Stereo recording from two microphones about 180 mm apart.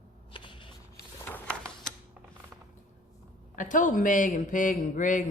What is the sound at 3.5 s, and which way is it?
A woman's voice, 45° left (ahead or behind).